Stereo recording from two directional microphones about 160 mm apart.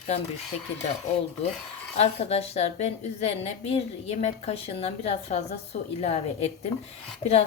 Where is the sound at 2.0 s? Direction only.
40° left (ahead or behind).